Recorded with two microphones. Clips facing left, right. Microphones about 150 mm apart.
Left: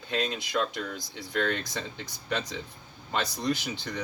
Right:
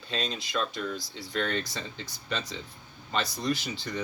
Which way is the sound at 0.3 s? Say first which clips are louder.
Left 2 dB; 20° left (ahead or behind).